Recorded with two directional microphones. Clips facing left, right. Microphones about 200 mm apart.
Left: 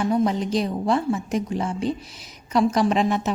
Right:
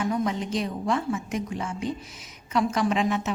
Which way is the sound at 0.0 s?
35° left (ahead or behind).